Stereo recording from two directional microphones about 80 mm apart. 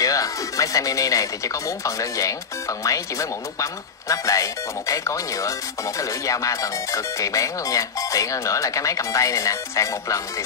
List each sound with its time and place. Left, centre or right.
0.0 s speech: left